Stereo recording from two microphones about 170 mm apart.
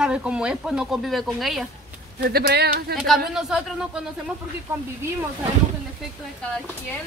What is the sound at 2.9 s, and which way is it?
Speech, centre (ahead or behind).